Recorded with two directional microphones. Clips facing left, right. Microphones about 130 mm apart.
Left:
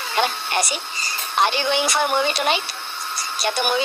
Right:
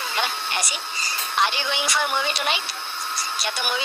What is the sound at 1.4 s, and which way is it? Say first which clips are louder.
A woman's voice: left 5 dB; 45° left (ahead or behind).